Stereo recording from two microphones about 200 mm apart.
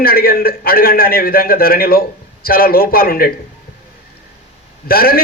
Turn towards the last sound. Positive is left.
turn(degrees=50)  # may be behind; listen again after turning